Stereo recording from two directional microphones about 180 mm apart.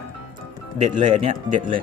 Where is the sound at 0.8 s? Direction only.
30° right (ahead or behind).